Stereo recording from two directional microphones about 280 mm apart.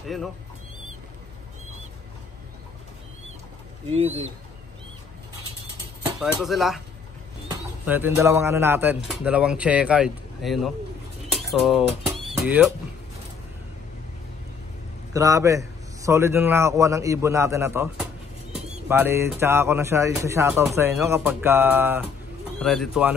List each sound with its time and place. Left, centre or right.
3.9 s speech: right
6.4 s speech: centre
11.3 s pigeon: centre
12.4 s speech: centre
15.1 s speech: centre